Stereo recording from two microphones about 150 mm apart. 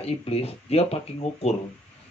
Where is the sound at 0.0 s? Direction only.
40° left (ahead or behind).